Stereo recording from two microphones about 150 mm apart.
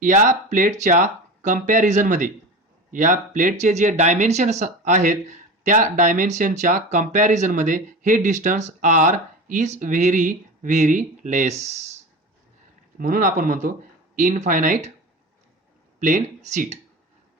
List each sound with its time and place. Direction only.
0.0 s speech: 60° right (ahead or behind)
13.0 s speech: 65° right (ahead or behind)
14.2 s speech: 55° right (ahead or behind)
16.0 s speech: 60° right (ahead or behind)